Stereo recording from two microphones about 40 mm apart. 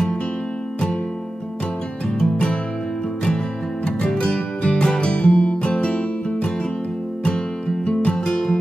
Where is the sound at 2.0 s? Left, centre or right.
Left.